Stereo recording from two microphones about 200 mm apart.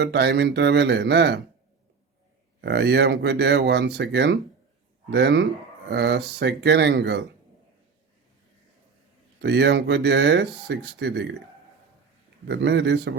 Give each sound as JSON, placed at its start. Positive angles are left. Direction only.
{"t": 0.0, "sound": "speech", "side_deg": -55}
{"t": 2.6, "sound": "speech", "side_deg": -55}
{"t": 9.4, "sound": "speech", "side_deg": -55}
{"t": 12.5, "sound": "speech", "side_deg": -60}